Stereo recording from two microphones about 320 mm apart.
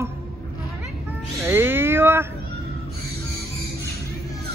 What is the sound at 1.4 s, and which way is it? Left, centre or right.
Speech, centre.